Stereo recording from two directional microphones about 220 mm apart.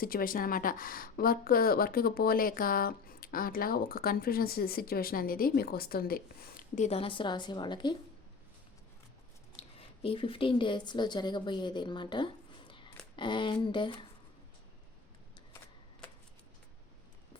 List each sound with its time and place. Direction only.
0.0 s a woman's voice: 40° left (ahead or behind); by 7.9 s 20° left (ahead or behind)
9.6 s a woman's voice: 25° left (ahead or behind)